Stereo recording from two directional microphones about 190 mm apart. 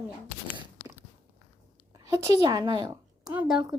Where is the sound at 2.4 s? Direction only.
20° right (ahead or behind).